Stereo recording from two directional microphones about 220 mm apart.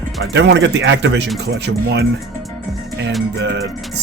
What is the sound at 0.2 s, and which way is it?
Speech, 55° right (ahead or behind).